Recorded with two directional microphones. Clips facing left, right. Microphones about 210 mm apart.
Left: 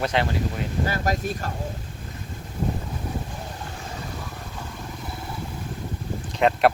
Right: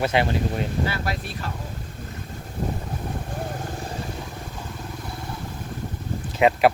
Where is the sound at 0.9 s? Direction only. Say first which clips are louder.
Left 3 dB; 40° left (ahead or behind).